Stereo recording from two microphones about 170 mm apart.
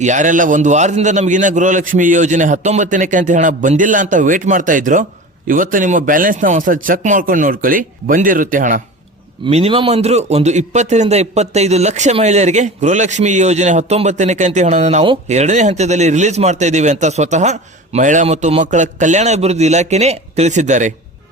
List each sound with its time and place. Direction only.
0.0 s a man's voice: 45° right (ahead or behind)
9.5 s a man's voice: 35° right (ahead or behind)